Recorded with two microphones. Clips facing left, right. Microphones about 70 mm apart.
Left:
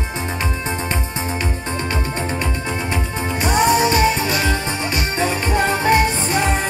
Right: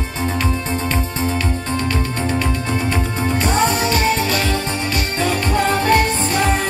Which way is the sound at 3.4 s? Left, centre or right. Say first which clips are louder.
Left 4 dB; left.